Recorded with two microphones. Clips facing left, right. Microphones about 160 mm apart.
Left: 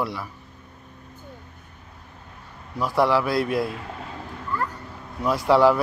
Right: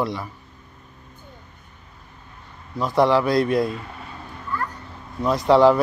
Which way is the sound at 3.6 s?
75° left (ahead or behind).